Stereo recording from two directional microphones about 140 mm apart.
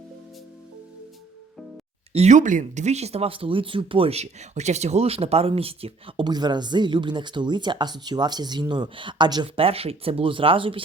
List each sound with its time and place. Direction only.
2.1 s speech: 55° right (ahead or behind)